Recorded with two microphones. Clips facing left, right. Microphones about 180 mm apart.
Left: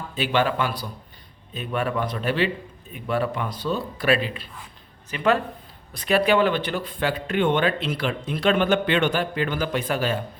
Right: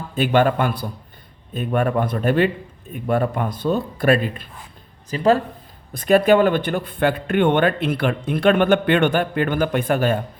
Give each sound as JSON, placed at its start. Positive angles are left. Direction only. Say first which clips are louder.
{"t": 0.2, "sound": "speech", "louder": "right 5 dB", "side_deg": -50}
{"t": 5.1, "sound": "speech", "louder": "right 5 dB", "side_deg": -35}
{"t": 5.9, "sound": "speech", "louder": "right 6 dB", "side_deg": -50}